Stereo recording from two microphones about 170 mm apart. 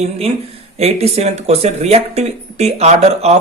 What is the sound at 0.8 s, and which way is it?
Speech, 35° right (ahead or behind).